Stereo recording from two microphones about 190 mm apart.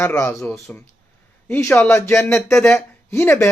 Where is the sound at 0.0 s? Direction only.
15° left (ahead or behind).